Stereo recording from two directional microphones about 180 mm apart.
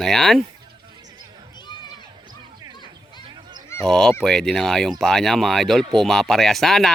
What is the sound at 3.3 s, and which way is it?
Honk, 25° right (ahead or behind).